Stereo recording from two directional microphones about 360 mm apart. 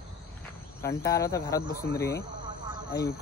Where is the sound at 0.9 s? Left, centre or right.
Centre.